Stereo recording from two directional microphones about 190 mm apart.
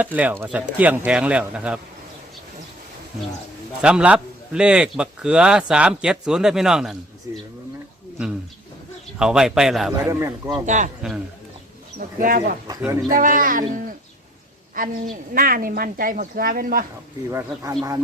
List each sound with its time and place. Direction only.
0.0 s speech: 10° right (ahead or behind)
3.8 s a man's voice: 5° right (ahead or behind)
9.1 s a man's voice: 5° right (ahead or behind)
10.0 s speech: 15° right (ahead or behind)
11.0 s a man's voice: 5° right (ahead or behind)
11.9 s a woman's voice: 45° right (ahead or behind)
17.3 s speech: 15° right (ahead or behind)